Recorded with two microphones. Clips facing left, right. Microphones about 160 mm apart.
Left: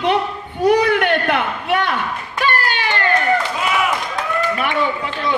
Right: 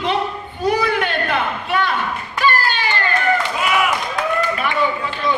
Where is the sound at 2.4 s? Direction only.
70° left (ahead or behind).